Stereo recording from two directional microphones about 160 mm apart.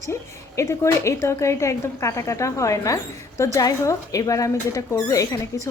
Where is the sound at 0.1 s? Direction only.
15° left (ahead or behind).